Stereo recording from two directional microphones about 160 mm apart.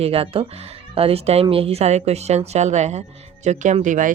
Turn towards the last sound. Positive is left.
turn(degrees=-55)  # may be behind; listen again after turning